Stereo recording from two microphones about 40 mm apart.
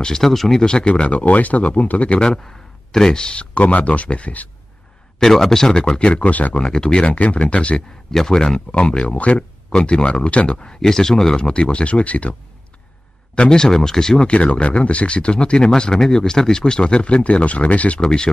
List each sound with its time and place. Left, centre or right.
0.0 s speech: centre
0.7 s speech: left
2.1 s speech: left
3.5 s speech: left
5.2 s speech: centre; by 6.6 s left
6.6 s speech: centre
8.1 s speech: centre; by 9.4 s left
9.7 s speech: left
10.6 s speech: centre
11.4 s speech: left
13.3 s speech: centre
14.2 s speech: left
17.9 s speech: centre